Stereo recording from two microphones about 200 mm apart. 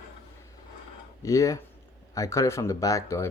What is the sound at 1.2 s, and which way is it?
Speech, 15° left (ahead or behind).